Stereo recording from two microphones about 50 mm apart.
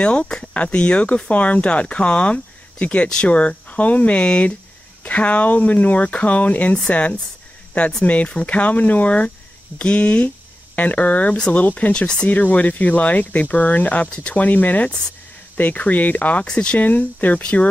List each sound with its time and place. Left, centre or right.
0.0 s speech: left
16.4 s speech: centre
16.7 s speech: left